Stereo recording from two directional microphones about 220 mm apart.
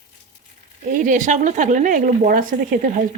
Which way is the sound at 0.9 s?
35° right (ahead or behind).